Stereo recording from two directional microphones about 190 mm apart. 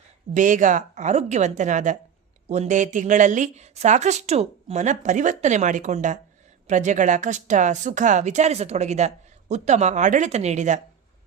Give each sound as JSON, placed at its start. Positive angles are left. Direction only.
{"t": 0.3, "sound": "a woman's voice", "side_deg": -40}